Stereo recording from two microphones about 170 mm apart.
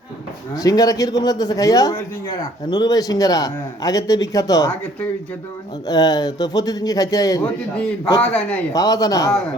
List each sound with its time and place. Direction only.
0.5 s a man's voice: 20° left (ahead or behind)
5.9 s a man's voice: 25° left (ahead or behind)
8.2 s a man's voice: 10° left (ahead or behind)
8.7 s a man's voice: 20° left (ahead or behind)